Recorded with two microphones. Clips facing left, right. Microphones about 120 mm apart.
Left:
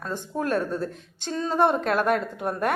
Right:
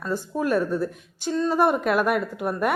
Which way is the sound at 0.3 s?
10° right (ahead or behind).